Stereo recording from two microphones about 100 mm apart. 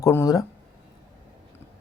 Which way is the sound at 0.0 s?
30° left (ahead or behind).